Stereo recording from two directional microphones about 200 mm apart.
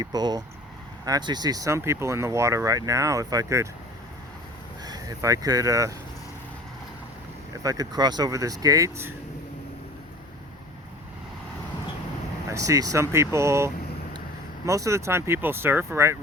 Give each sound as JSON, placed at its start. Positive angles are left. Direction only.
{"t": 0.0, "sound": "speech", "side_deg": -20}
{"t": 4.8, "sound": "speech", "side_deg": -20}
{"t": 7.6, "sound": "speech", "side_deg": -15}
{"t": 12.5, "sound": "speech", "side_deg": -15}